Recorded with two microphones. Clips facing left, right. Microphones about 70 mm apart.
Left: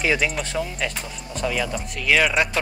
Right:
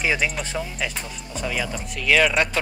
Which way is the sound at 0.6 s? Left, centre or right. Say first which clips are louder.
Left 2 dB; centre.